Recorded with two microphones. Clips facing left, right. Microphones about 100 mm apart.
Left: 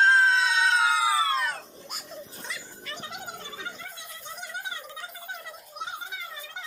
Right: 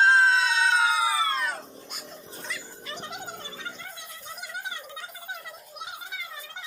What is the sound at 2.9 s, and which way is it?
Music, 5° left (ahead or behind).